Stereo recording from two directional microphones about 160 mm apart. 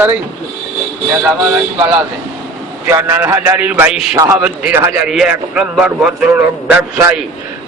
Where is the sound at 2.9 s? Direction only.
15° right (ahead or behind).